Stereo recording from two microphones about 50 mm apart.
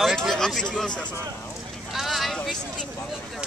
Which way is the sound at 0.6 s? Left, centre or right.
Centre.